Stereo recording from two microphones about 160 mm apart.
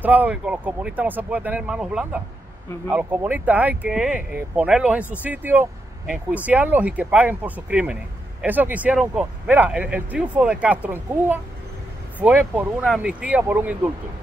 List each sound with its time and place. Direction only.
0.0 s speech: 10° right (ahead or behind)